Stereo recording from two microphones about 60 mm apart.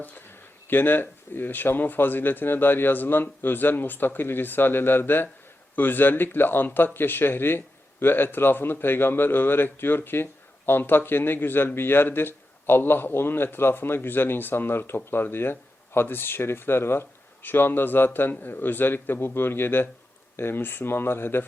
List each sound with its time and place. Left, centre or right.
0.7 s a man's voice: left